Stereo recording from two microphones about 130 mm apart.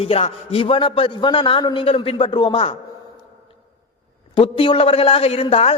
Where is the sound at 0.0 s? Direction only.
50° left (ahead or behind).